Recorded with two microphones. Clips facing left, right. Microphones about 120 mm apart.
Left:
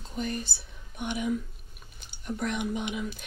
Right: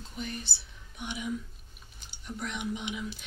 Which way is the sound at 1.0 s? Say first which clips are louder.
Left 6 dB; 55° left (ahead or behind).